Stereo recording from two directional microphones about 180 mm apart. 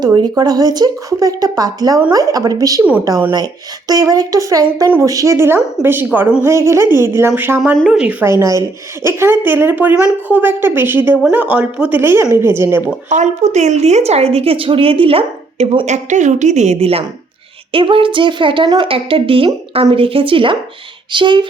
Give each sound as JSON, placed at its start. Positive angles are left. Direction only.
{"t": 0.0, "sound": "speech", "side_deg": -20}
{"t": 13.1, "sound": "a woman's voice", "side_deg": -40}
{"t": 16.0, "sound": "a woman's voice", "side_deg": -40}